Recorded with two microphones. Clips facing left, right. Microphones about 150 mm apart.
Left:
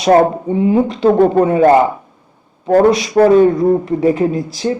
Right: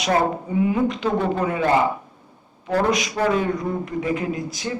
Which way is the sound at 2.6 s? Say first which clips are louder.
Left 11 dB; 50° left (ahead or behind).